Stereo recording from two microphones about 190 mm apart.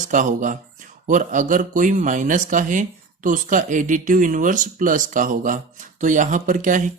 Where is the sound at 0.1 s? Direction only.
40° right (ahead or behind).